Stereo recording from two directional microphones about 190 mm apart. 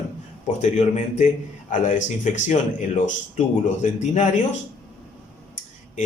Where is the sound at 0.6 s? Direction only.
40° left (ahead or behind).